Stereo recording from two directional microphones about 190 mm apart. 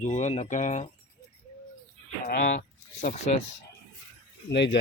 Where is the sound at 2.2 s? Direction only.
50° left (ahead or behind).